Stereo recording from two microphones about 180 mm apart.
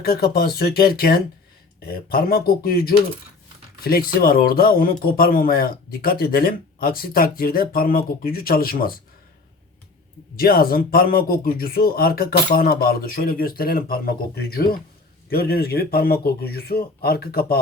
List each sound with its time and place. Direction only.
0.0 s speech: 60° left (ahead or behind)
10.3 s speech: 55° left (ahead or behind)